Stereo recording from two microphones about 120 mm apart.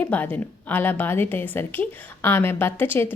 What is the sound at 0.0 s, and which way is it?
A woman's voice, 15° left (ahead or behind).